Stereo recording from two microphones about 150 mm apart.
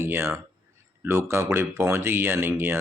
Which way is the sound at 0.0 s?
15° right (ahead or behind).